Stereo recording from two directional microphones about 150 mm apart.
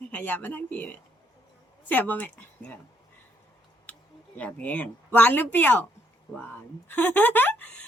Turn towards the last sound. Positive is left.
turn(degrees=10)  # may be behind; listen again after turning